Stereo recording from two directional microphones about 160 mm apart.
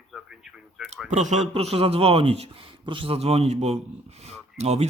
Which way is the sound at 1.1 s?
45° right (ahead or behind).